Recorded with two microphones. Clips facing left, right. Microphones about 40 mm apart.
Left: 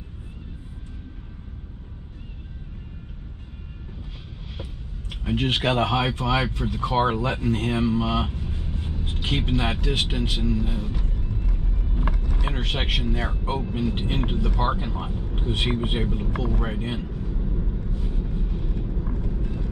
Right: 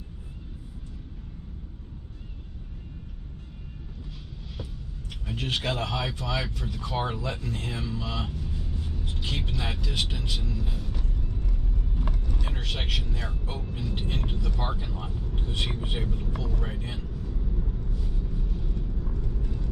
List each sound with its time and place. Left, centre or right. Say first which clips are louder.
5.1 s speech: left 7 dB; left
12.3 s vehicle: left 5 dB; left